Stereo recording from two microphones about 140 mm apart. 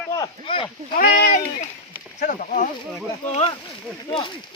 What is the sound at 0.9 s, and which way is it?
Speech, 75° left (ahead or behind).